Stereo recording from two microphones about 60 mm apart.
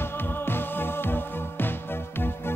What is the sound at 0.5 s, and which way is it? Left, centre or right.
Music, left.